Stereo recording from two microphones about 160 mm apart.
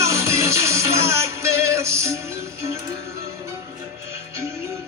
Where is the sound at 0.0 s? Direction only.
15° right (ahead or behind).